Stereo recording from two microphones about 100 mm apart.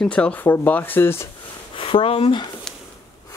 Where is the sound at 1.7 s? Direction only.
60° left (ahead or behind).